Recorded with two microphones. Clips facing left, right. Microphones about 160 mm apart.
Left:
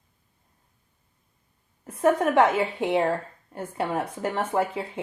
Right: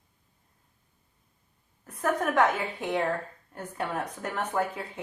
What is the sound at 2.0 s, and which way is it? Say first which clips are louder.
A woman's voice: left 5 dB; 25° left (ahead or behind).